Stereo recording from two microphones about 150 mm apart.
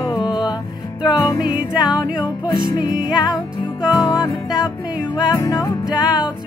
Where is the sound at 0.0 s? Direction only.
25° left (ahead or behind).